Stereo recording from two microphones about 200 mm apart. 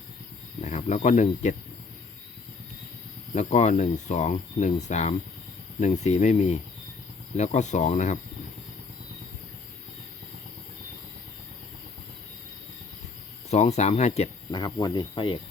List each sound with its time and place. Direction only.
0.6 s speech: 35° left (ahead or behind)
3.3 s speech: 35° left (ahead or behind)
13.5 s speech: 35° left (ahead or behind)
14.5 s speech: 20° left (ahead or behind)